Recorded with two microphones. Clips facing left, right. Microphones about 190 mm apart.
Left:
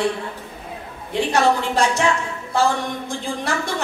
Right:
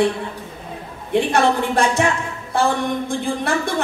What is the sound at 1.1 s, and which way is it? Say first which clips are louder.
A woman's voice: right 2 dB; 55° right (ahead or behind).